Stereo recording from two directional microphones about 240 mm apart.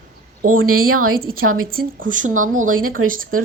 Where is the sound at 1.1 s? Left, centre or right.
Right.